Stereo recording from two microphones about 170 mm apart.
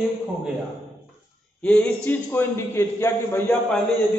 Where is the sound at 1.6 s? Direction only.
10° left (ahead or behind).